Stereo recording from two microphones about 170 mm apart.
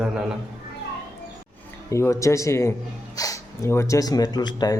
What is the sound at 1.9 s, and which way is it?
A man's voice, 15° left (ahead or behind).